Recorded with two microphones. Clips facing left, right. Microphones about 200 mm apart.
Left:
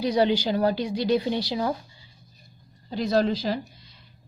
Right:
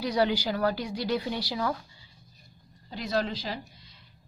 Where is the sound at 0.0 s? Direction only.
20° left (ahead or behind).